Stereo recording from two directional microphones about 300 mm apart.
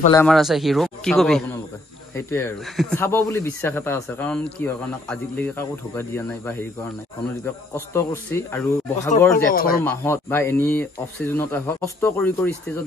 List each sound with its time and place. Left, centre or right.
0.1 s a man's voice: centre
9.5 s speech: left
9.8 s speech: centre